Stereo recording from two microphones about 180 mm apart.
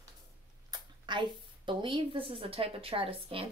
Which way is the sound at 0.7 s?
25° right (ahead or behind).